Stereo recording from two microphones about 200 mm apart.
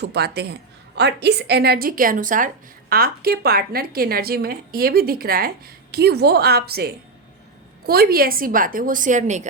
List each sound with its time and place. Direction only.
0.0 s a woman's voice: 55° right (ahead or behind); by 9.5 s 35° right (ahead or behind)